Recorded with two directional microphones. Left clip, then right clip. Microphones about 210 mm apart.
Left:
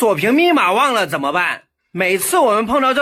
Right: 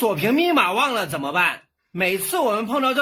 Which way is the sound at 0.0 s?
10° left (ahead or behind).